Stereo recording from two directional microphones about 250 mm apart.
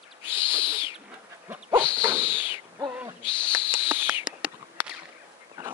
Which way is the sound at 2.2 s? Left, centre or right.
Left.